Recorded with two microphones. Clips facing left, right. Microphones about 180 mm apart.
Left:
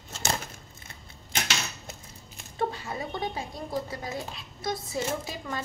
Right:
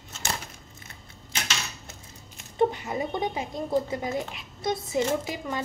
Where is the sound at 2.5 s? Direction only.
20° right (ahead or behind).